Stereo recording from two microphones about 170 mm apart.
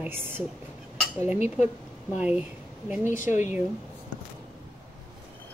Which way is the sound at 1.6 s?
10° right (ahead or behind).